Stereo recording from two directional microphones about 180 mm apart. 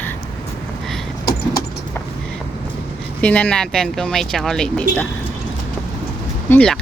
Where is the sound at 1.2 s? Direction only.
55° left (ahead or behind).